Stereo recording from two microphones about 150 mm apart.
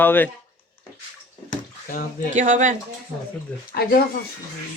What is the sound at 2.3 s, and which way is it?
Speech, 60° right (ahead or behind).